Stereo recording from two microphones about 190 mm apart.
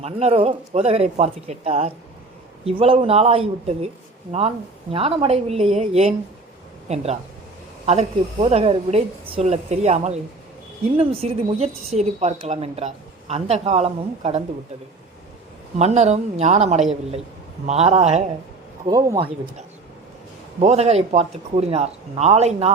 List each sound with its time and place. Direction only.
0.0 s a woman's voice: 35° right (ahead or behind)
15.8 s a woman's voice: 35° right (ahead or behind)
18.9 s speech: 20° right (ahead or behind)
20.6 s a woman's voice: 35° right (ahead or behind)